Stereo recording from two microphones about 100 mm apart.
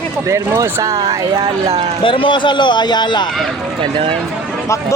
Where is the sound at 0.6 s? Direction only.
35° right (ahead or behind).